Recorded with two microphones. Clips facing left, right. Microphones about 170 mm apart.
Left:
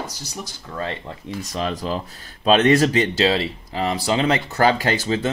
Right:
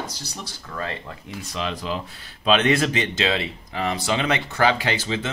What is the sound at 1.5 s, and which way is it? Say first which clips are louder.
Speech: left 3 dB; 40° left (ahead or behind).